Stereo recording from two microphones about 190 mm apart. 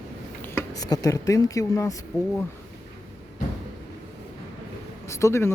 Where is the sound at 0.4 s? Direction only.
15° left (ahead or behind).